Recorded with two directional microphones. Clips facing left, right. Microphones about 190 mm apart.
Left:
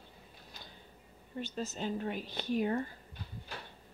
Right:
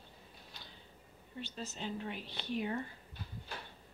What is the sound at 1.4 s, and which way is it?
Speech, 45° left (ahead or behind).